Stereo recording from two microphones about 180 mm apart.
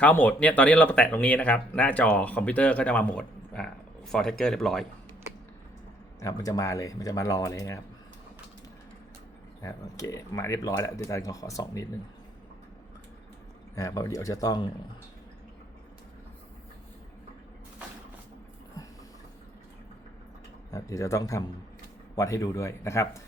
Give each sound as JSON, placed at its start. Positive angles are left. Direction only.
{"t": 0.0, "sound": "speech", "side_deg": 10}
{"t": 6.1, "sound": "speech", "side_deg": 20}
{"t": 9.6, "sound": "speech", "side_deg": 20}
{"t": 13.7, "sound": "speech", "side_deg": 15}
{"t": 20.7, "sound": "speech", "side_deg": 20}